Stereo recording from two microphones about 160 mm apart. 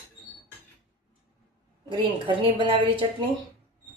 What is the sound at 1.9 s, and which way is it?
A woman's voice, 30° right (ahead or behind).